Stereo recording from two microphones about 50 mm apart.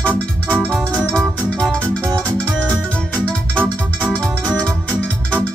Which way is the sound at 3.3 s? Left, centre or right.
Left.